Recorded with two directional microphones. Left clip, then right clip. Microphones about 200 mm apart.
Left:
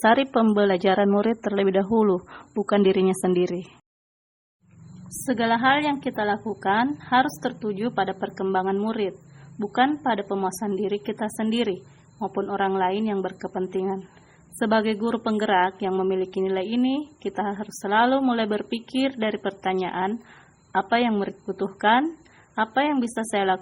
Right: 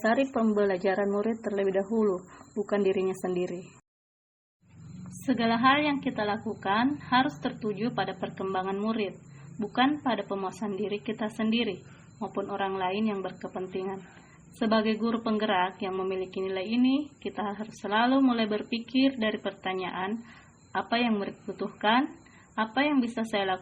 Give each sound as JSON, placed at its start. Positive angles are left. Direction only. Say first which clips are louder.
{"t": 0.0, "sound": "a woman's voice", "louder": "left 7 dB", "side_deg": 45}
{"t": 5.4, "sound": "a woman's voice", "louder": "left 4 dB", "side_deg": 45}